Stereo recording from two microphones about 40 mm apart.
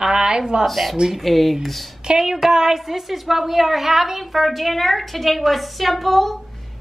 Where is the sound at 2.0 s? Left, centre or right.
Centre.